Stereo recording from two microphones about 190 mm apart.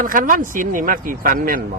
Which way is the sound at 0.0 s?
45° right (ahead or behind).